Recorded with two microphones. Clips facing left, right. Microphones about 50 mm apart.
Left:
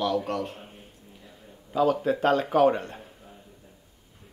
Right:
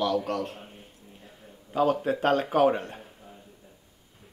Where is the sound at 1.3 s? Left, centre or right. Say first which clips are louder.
Left 1 dB; right.